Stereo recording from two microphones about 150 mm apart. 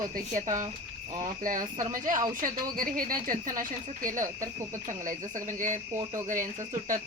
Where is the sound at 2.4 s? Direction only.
70° right (ahead or behind).